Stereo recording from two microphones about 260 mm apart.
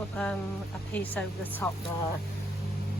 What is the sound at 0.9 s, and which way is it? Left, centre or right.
Speech, centre.